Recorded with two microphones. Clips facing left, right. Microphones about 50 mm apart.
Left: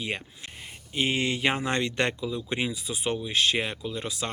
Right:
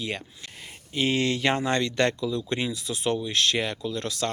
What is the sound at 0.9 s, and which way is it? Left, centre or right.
Speech, centre.